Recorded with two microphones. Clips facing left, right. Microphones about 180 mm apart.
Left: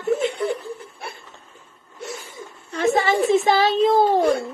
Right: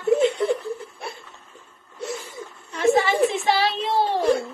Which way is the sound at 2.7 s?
40° left (ahead or behind).